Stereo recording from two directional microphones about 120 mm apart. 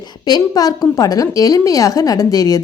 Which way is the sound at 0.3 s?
35° left (ahead or behind).